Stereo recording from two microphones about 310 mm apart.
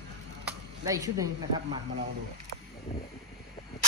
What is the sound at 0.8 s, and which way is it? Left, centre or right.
Speech, centre.